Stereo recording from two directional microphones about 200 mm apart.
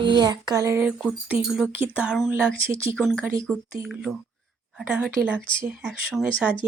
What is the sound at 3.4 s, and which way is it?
Speech, centre (ahead or behind).